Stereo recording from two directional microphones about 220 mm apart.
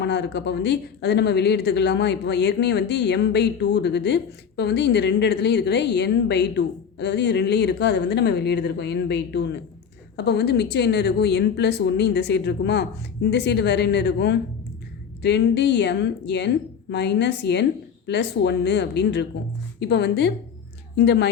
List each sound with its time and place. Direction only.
0.0 s speech: 50° left (ahead or behind)